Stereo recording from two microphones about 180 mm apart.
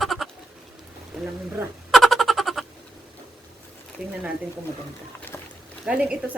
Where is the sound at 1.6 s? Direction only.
Centre (ahead or behind).